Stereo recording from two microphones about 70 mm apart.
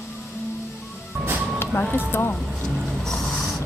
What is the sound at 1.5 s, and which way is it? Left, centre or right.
Vehicle, left.